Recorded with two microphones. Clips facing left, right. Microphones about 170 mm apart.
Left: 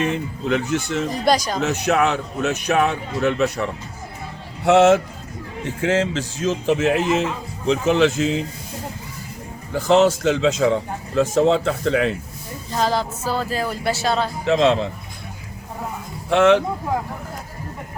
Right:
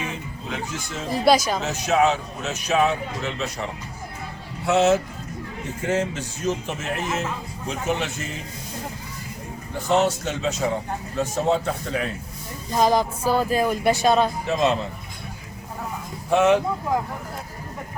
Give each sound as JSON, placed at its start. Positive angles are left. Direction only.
{"t": 0.0, "sound": "a man's voice", "side_deg": 70}
{"t": 1.3, "sound": "speech", "side_deg": -5}
{"t": 1.6, "sound": "speech", "side_deg": 65}
{"t": 4.6, "sound": "speech", "side_deg": 85}
{"t": 9.7, "sound": "speech", "side_deg": 90}
{"t": 12.7, "sound": "speech", "side_deg": -15}
{"t": 14.4, "sound": "speech", "side_deg": 90}
{"t": 16.3, "sound": "speech", "side_deg": 90}